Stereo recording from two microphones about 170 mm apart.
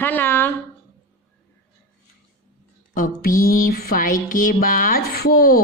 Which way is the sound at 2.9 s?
55° left (ahead or behind).